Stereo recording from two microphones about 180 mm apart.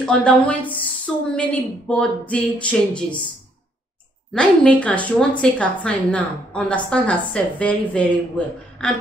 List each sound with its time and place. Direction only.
0.0 s a woman's voice: 5° left (ahead or behind)
4.3 s a woman's voice: 5° left (ahead or behind)